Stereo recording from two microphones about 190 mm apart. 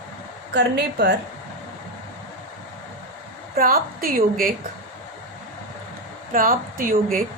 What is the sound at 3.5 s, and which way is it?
Speech, 50° right (ahead or behind).